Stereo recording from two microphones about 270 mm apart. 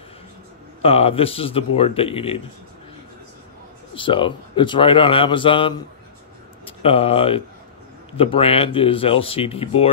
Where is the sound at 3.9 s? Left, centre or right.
Centre.